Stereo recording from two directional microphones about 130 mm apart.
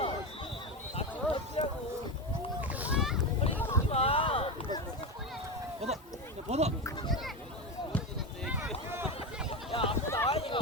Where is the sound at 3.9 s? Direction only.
50° left (ahead or behind).